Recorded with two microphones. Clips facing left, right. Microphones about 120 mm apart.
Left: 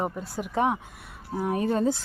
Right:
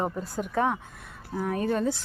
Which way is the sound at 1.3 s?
20° left (ahead or behind).